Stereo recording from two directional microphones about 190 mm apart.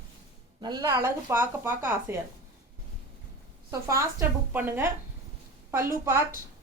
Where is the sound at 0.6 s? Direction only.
20° right (ahead or behind).